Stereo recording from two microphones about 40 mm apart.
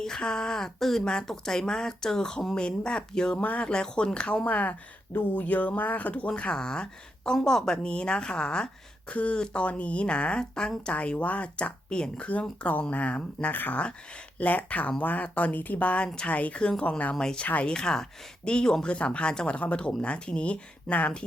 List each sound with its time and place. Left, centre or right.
0.0 s speech: centre
3.3 s speech: left
3.6 s speech: centre
4.4 s speech: left
6.6 s speech: centre
7.8 s speech: left
9.1 s speech: left
10.9 s speech: left
12.3 s speech: left
13.5 s speech: left
17.7 s speech: centre
19.5 s speech: left
20.9 s speech: centre